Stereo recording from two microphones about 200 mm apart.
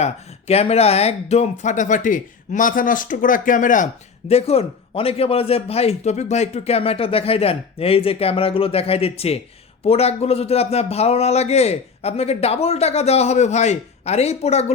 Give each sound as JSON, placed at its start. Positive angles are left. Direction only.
{"t": 0.0, "sound": "a man's voice", "side_deg": 30}